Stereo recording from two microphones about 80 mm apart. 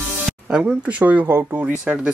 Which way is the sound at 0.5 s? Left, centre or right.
Centre.